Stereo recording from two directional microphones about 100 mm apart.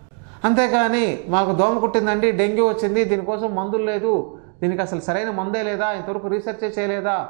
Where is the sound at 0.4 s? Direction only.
15° right (ahead or behind).